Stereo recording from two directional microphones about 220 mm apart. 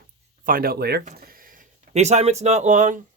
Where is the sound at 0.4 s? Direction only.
40° right (ahead or behind).